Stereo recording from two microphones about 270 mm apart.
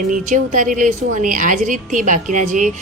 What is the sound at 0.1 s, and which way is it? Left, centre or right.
Speech, right.